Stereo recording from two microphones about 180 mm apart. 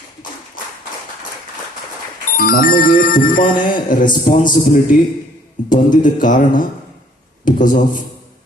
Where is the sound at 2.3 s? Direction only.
55° left (ahead or behind).